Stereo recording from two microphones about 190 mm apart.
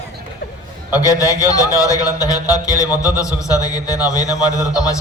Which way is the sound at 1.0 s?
15° left (ahead or behind).